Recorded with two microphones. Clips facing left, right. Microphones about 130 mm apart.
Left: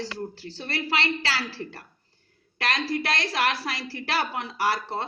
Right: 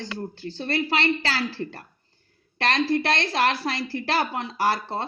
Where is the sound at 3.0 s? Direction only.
25° right (ahead or behind).